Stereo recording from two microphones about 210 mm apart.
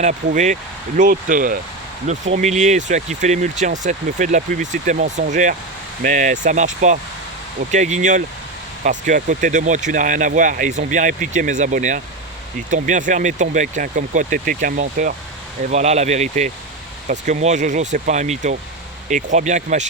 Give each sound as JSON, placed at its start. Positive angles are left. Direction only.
{"t": 0.0, "sound": "speech", "side_deg": -35}